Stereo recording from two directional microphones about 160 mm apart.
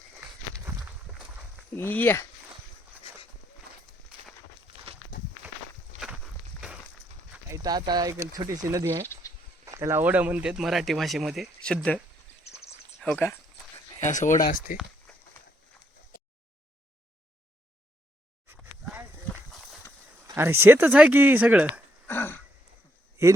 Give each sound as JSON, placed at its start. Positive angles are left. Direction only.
{"t": 1.7, "sound": "speech", "side_deg": 10}
{"t": 5.1, "sound": "walk", "side_deg": 60}
{"t": 5.9, "sound": "walk", "side_deg": -50}
{"t": 7.5, "sound": "speech", "side_deg": -25}
{"t": 13.0, "sound": "speech", "side_deg": 5}
{"t": 14.0, "sound": "speech", "side_deg": 50}
{"t": 14.4, "sound": "speech", "side_deg": 60}
{"t": 18.5, "sound": "a sound", "side_deg": -10}
{"t": 20.2, "sound": "speech", "side_deg": -15}
{"t": 22.0, "sound": "throat clearing", "side_deg": 15}